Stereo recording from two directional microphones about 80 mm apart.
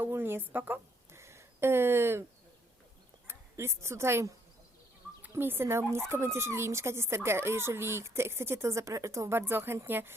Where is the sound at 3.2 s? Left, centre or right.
Right.